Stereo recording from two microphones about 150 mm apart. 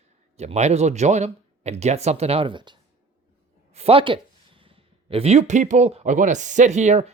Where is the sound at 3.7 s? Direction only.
40° right (ahead or behind).